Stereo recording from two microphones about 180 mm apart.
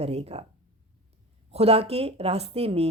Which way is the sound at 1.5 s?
35° right (ahead or behind).